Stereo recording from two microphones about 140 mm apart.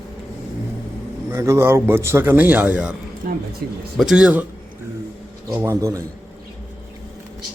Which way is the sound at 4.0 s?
5° right (ahead or behind).